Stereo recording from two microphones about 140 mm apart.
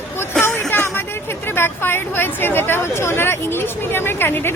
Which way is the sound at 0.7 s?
15° left (ahead or behind).